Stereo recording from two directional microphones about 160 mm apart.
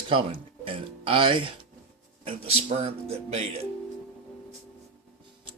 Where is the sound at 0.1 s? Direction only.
35° right (ahead or behind).